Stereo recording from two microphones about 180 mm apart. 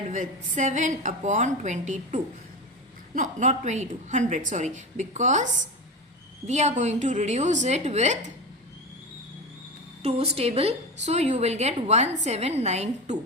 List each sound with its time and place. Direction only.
0.1 s a woman's voice: 45° right (ahead or behind)
6.5 s a woman's voice: 40° right (ahead or behind)
10.0 s a woman's voice: 35° right (ahead or behind)